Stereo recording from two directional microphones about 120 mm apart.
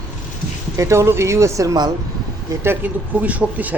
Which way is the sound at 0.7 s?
25° right (ahead or behind).